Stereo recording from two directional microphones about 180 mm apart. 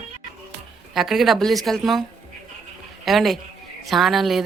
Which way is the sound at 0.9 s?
Centre (ahead or behind).